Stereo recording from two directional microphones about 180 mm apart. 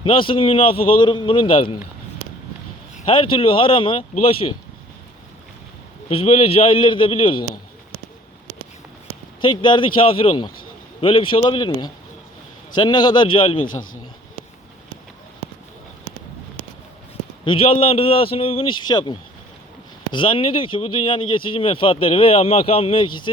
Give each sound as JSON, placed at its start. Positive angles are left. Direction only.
{"t": 0.0, "sound": "speech", "side_deg": 30}
{"t": 2.9, "sound": "speech", "side_deg": 30}
{"t": 6.1, "sound": "a man's voice", "side_deg": 35}
{"t": 9.4, "sound": "speech", "side_deg": 25}
{"t": 13.7, "sound": "speech", "side_deg": 50}
{"t": 17.4, "sound": "a man's voice", "side_deg": 30}
{"t": 20.1, "sound": "speech", "side_deg": 30}